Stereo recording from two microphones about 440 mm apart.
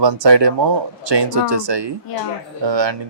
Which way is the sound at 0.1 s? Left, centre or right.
Right.